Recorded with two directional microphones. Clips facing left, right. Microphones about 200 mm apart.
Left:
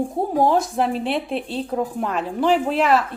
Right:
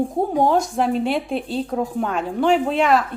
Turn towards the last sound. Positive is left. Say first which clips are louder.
# right 1 dB
turn(degrees=0)  # may be behind; listen again after turning